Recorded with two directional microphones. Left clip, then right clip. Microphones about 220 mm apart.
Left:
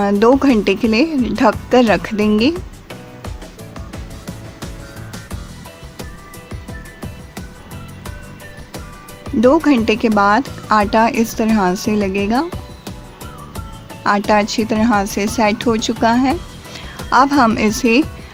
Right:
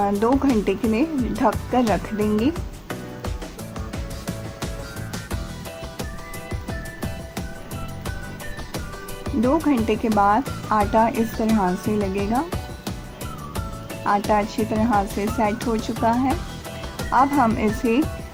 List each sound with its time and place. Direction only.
0.0 s speech: 35° left (ahead or behind)
3.8 s music: centre (ahead or behind)
6.7 s music: centre (ahead or behind)
9.4 s speech: 35° left (ahead or behind)
14.3 s speech: 30° left (ahead or behind)